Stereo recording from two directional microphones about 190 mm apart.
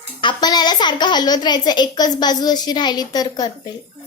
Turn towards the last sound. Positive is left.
turn(degrees=20)  # may be behind; listen again after turning